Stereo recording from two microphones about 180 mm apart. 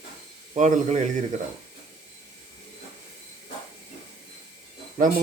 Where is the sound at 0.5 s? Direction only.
45° right (ahead or behind).